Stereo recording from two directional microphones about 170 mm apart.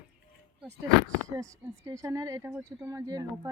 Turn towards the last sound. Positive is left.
turn(degrees=-20)  # may be behind; listen again after turning